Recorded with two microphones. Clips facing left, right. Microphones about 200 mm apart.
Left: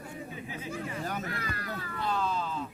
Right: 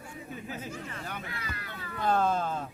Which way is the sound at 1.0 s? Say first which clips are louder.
Left 5 dB; 40° left (ahead or behind).